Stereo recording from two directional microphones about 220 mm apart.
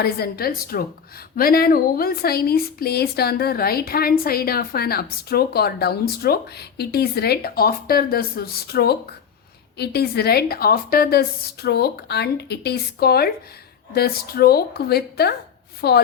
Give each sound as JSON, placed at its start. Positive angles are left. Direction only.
{"t": 0.0, "sound": "speech", "side_deg": 45}